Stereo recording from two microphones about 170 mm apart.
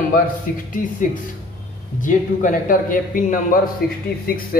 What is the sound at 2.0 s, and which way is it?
A man's voice, 50° left (ahead or behind).